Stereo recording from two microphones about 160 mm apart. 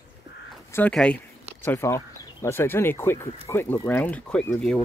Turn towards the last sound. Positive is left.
turn(degrees=5)  # may be behind; listen again after turning